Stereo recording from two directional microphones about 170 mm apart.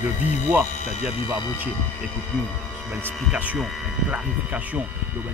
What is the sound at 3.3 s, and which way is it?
Speech, 5° right (ahead or behind).